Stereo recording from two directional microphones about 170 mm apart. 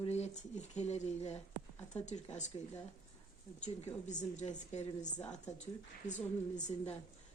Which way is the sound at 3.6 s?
45° left (ahead or behind).